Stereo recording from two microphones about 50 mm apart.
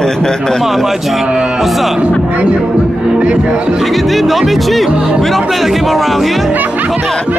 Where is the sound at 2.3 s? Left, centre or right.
Right.